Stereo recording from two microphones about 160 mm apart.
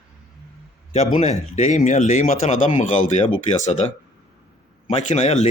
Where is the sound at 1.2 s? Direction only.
45° left (ahead or behind).